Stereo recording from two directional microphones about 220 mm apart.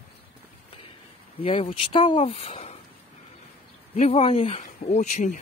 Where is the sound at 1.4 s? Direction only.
25° left (ahead or behind).